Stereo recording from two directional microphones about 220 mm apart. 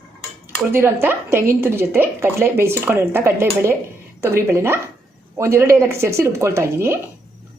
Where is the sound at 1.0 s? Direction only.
10° right (ahead or behind).